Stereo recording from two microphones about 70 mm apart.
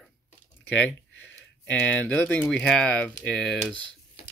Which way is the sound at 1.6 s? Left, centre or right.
Centre.